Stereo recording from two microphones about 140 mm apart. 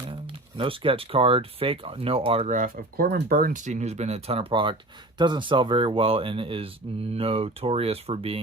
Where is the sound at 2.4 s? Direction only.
70° right (ahead or behind).